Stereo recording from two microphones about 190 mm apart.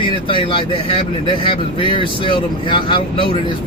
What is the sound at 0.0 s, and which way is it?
Speech, 25° left (ahead or behind).